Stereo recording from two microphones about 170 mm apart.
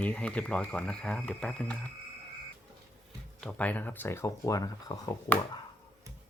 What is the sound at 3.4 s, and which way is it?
Speech, 5° left (ahead or behind).